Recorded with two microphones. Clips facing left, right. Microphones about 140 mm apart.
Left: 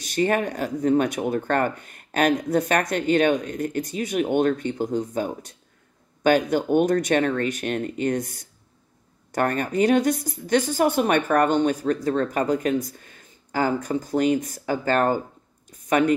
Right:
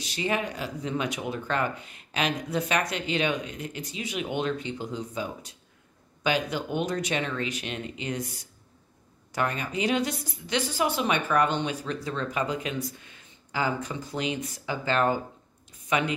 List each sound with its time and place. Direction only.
0.0 s speech: 50° left (ahead or behind)